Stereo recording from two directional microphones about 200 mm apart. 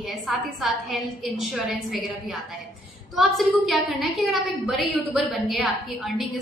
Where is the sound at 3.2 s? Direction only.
Centre (ahead or behind).